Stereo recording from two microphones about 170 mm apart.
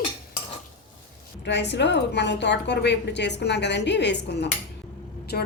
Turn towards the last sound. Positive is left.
turn(degrees=60)  # may be behind; listen again after turning